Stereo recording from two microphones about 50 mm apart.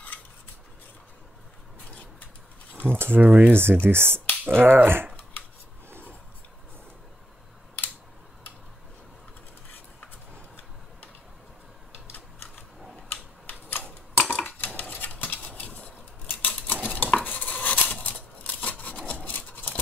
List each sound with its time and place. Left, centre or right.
2.8 s speech: right
3.5 s speech: right
13.1 s typewriter: left
14.3 s cutlery: left
14.8 s a sound: left
16.8 s cutlery: left
18.0 s scissors: left